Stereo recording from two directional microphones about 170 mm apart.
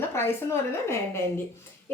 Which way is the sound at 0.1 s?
15° left (ahead or behind).